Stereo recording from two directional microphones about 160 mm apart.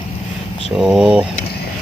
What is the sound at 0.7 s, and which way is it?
Speech, 5° right (ahead or behind).